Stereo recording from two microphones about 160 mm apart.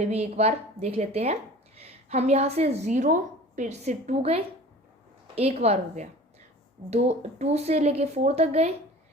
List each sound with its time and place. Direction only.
0.0 s speech: 40° right (ahead or behind)